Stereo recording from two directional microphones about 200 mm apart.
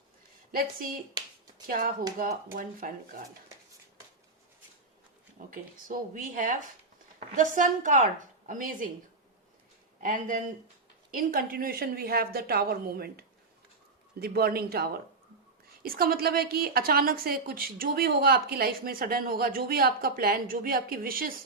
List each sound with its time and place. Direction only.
0.5 s a woman's voice: 45° right (ahead or behind)
5.5 s a woman's voice: 45° right (ahead or behind)
10.0 s a woman's voice: 45° right (ahead or behind)